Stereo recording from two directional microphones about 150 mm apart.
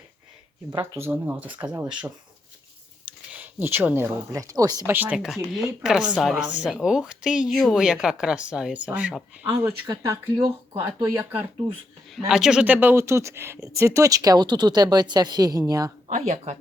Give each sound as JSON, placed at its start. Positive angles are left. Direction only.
{"t": 0.7, "sound": "speech", "side_deg": -15}
{"t": 4.9, "sound": "a woman's voice", "side_deg": -10}
{"t": 9.8, "sound": "speech", "side_deg": -25}
{"t": 12.3, "sound": "speech", "side_deg": -5}
{"t": 16.0, "sound": "speech", "side_deg": -50}